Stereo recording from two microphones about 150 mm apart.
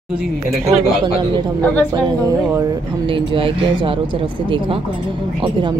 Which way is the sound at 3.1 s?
35° right (ahead or behind).